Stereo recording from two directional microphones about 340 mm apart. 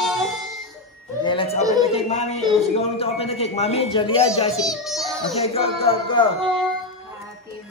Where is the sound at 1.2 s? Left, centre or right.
Centre.